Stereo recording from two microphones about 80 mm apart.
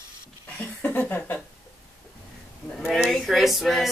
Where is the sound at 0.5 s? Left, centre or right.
Left.